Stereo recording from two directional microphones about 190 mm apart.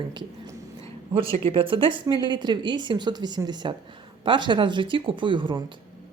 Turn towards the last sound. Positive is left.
turn(degrees=-25)  # may be behind; listen again after turning